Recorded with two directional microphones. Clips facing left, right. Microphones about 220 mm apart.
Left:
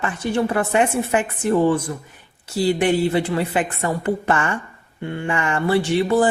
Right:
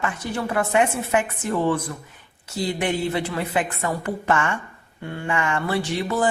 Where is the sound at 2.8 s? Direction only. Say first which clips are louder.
Left 3 dB; 30° left (ahead or behind).